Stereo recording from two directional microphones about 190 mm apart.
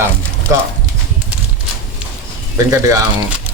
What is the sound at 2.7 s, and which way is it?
Speech, 15° right (ahead or behind).